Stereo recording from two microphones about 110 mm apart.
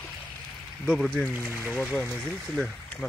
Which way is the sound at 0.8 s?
5° left (ahead or behind).